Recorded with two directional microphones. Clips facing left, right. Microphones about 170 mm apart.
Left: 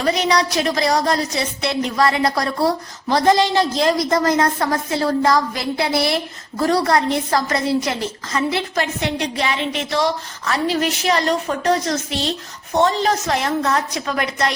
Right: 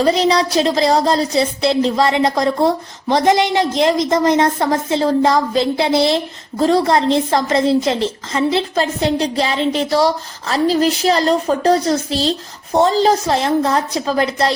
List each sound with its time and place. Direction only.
0.0 s speech: 30° right (ahead or behind)